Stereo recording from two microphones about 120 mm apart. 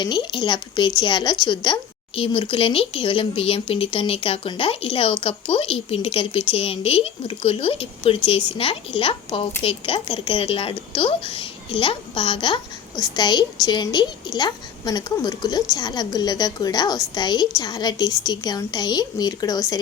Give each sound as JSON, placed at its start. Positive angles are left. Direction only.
{"t": 0.0, "sound": "a woman's voice", "side_deg": 40}